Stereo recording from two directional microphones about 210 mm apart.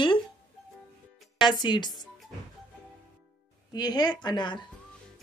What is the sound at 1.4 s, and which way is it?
Speech, 20° left (ahead or behind).